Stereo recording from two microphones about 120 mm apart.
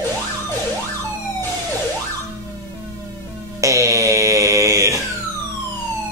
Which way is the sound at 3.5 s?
25° right (ahead or behind).